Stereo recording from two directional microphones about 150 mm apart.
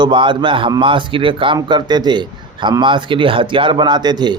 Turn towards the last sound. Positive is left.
turn(degrees=-30)  # may be behind; listen again after turning